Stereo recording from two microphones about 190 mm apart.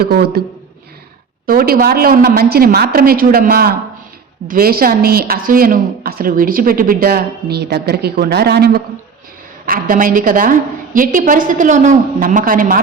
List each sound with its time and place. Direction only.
0.0 s a woman's voice: 55° right (ahead or behind)
1.5 s a woman's voice: 50° right (ahead or behind)